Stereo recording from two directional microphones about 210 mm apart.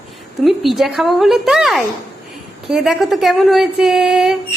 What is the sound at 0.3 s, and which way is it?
A woman's voice, centre (ahead or behind).